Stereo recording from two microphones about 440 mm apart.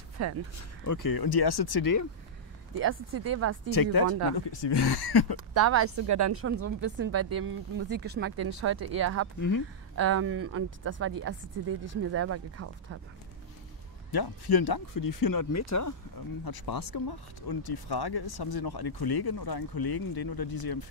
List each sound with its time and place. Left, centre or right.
0.2 s speech: right
0.6 s speech: left
2.7 s a woman's voice: right
3.7 s speech: left
5.5 s a woman's voice: right
14.1 s speech: left
16.4 s speech: left